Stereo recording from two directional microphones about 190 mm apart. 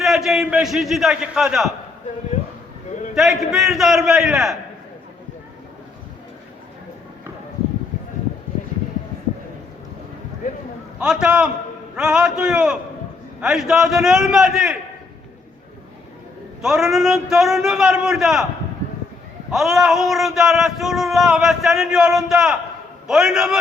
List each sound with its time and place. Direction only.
0.0 s speech: centre (ahead or behind)
3.2 s speech: centre (ahead or behind)
11.0 s speech: 5° right (ahead or behind)
16.6 s speech: 5° right (ahead or behind)
19.5 s speech: centre (ahead or behind)